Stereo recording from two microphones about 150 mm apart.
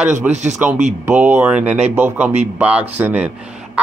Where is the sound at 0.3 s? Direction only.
50° right (ahead or behind).